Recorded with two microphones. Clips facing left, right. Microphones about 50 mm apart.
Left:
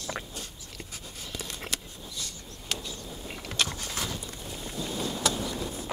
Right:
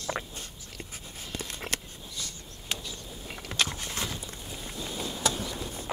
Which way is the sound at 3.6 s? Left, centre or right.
Right.